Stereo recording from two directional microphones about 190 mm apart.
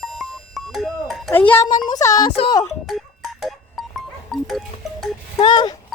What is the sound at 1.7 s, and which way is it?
Speech, 20° left (ahead or behind).